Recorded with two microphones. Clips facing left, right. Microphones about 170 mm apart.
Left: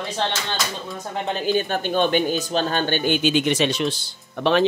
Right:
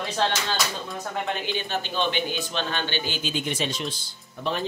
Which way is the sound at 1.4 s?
45° left (ahead or behind).